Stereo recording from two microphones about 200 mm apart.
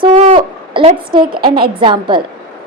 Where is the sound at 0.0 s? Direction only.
30° right (ahead or behind).